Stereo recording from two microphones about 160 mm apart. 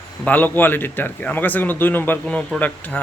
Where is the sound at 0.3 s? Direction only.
10° left (ahead or behind).